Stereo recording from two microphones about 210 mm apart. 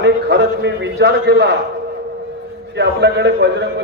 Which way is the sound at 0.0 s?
55° right (ahead or behind).